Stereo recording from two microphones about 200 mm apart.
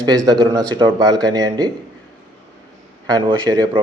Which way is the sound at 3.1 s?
20° right (ahead or behind).